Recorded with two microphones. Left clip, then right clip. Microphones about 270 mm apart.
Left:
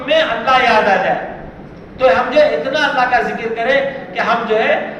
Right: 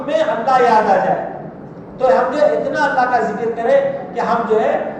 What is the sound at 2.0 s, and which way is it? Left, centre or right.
A man's voice, left.